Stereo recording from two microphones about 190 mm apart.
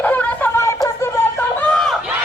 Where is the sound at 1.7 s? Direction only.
Centre (ahead or behind).